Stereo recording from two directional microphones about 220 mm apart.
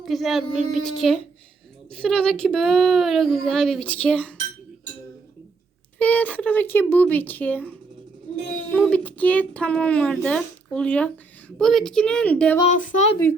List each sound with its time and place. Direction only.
0.0 s speech: centre (ahead or behind)
6.0 s speech: 10° left (ahead or behind)
12.6 s speech: 35° left (ahead or behind)